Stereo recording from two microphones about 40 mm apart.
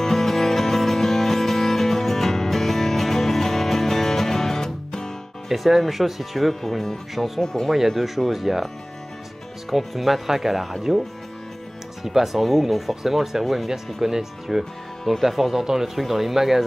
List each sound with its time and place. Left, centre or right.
0.0 s music: centre
5.5 s speech: centre
7.4 s speech: centre
7.7 s speech: centre
9.7 s speech: centre
12.0 s speech: centre
14.6 s speech: centre